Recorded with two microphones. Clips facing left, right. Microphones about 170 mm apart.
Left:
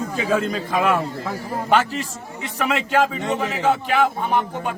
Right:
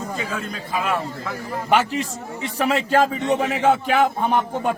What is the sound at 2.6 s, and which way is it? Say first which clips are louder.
Speech: right 1 dB; 35° right (ahead or behind).